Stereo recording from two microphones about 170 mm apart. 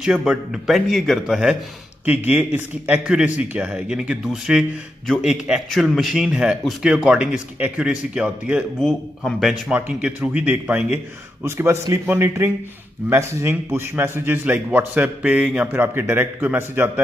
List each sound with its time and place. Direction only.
0.0 s a man's voice: 5° right (ahead or behind)